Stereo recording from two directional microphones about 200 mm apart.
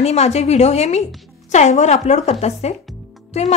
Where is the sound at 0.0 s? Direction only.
35° left (ahead or behind).